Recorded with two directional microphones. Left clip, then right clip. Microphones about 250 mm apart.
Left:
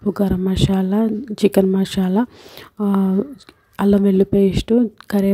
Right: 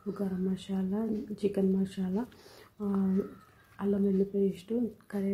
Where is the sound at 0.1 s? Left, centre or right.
Left.